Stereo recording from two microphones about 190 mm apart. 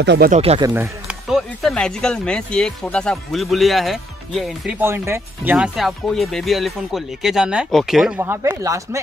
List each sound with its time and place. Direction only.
0.0 s speech: 65° right (ahead or behind)
0.3 s speech: 30° right (ahead or behind)
0.7 s speech: 10° right (ahead or behind)
1.3 s speech: centre (ahead or behind)
8.2 s speech: 15° right (ahead or behind)